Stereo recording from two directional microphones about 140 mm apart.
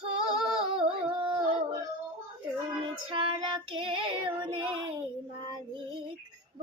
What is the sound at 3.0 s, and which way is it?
Child singing, 40° right (ahead or behind).